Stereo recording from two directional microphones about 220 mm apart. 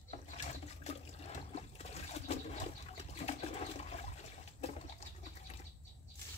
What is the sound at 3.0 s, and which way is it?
Pigeon, 30° left (ahead or behind).